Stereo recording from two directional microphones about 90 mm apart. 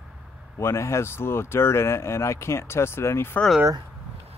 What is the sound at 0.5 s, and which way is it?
Speech, 30° left (ahead or behind).